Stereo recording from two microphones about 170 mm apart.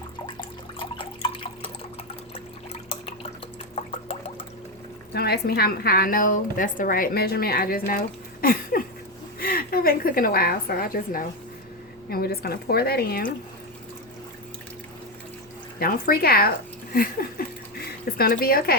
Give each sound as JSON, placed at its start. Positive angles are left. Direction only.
{"t": 0.8, "sound": "drip", "side_deg": 30}
{"t": 5.1, "sound": "a woman's voice", "side_deg": 70}
{"t": 15.8, "sound": "a woman's voice", "side_deg": 60}